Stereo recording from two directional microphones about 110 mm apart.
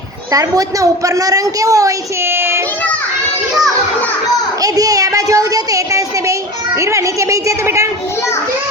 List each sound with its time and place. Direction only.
0.3 s a woman's voice: 30° right (ahead or behind)
2.3 s child singing: 20° right (ahead or behind)
4.6 s a woman's voice: 35° right (ahead or behind)